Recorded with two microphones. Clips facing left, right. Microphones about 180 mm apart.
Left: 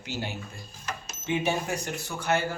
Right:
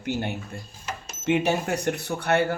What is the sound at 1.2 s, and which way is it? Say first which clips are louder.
A man's voice: right 5 dB; 70° right (ahead or behind).